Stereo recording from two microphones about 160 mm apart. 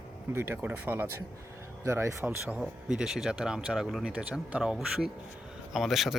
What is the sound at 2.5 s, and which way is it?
A man's voice, 5° right (ahead or behind).